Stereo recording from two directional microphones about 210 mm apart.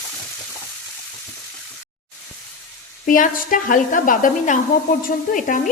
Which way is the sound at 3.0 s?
40° left (ahead or behind).